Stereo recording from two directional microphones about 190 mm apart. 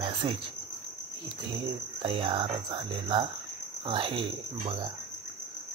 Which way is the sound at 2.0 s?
30° right (ahead or behind).